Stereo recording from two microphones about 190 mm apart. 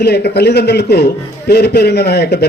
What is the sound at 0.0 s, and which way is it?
Speech, 60° left (ahead or behind).